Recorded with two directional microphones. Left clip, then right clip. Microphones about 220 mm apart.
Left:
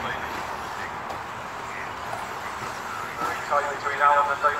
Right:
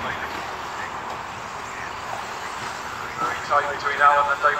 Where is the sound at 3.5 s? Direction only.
45° right (ahead or behind).